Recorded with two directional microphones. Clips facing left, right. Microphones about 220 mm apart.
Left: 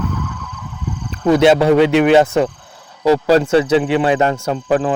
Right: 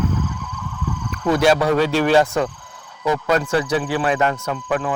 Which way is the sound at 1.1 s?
25° left (ahead or behind).